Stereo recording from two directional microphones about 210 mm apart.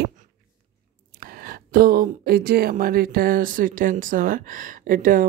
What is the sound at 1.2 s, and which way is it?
Speech, 45° right (ahead or behind).